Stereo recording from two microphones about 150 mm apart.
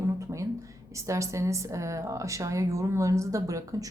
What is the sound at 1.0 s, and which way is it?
Speech, 20° right (ahead or behind).